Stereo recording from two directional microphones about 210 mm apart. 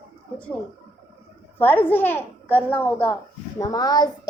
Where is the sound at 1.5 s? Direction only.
10° left (ahead or behind).